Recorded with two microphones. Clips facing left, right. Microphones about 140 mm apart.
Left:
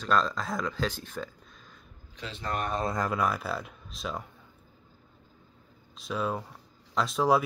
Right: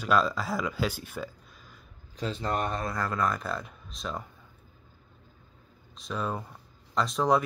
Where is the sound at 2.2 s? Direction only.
40° right (ahead or behind).